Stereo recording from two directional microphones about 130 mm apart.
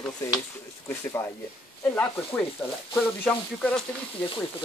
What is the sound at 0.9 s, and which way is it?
Speech, 20° left (ahead or behind).